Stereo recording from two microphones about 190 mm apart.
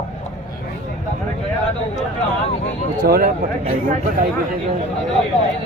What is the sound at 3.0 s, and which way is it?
Speech, 55° right (ahead or behind).